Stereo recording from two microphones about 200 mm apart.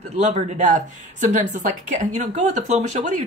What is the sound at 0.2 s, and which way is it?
Speech, 35° right (ahead or behind).